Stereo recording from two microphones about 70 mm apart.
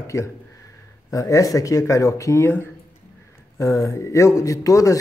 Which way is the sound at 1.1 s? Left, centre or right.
Left.